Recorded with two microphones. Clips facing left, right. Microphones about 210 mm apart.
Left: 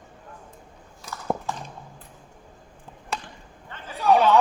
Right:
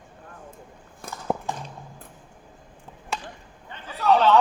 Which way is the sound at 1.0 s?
50° right (ahead or behind).